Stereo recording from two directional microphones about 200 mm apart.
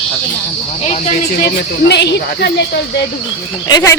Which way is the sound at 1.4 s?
55° left (ahead or behind).